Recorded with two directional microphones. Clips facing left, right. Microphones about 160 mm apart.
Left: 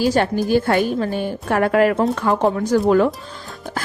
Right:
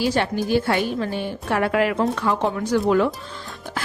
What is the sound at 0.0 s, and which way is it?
A woman's voice, 45° left (ahead or behind).